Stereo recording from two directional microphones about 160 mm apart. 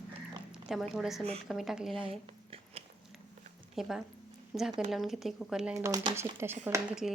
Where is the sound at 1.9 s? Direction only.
35° right (ahead or behind).